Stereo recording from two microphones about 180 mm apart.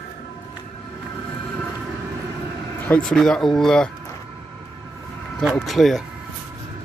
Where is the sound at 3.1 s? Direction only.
5° left (ahead or behind).